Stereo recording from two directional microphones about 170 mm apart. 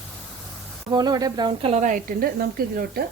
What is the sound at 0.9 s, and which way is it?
Speech, 25° right (ahead or behind).